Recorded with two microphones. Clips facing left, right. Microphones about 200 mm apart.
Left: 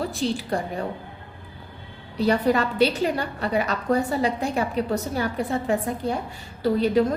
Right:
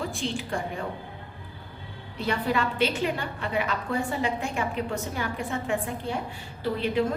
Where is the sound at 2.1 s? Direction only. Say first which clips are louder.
Left 6 dB; 40° left (ahead or behind).